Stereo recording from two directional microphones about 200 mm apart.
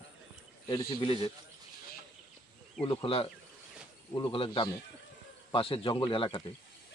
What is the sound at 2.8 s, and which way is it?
Speech, 25° left (ahead or behind).